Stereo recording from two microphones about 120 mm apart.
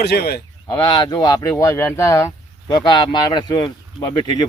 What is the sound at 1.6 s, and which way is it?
Speech, 25° left (ahead or behind).